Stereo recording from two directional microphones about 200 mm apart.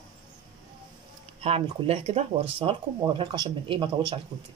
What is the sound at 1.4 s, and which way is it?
Speech, 30° right (ahead or behind).